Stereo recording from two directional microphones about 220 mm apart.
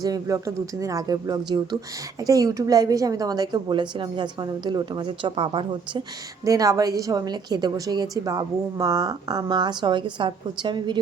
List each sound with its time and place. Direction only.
0.0 s a woman's voice: 15° right (ahead or behind)